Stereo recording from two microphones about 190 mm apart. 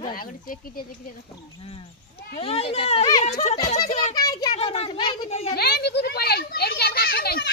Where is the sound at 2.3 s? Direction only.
30° left (ahead or behind).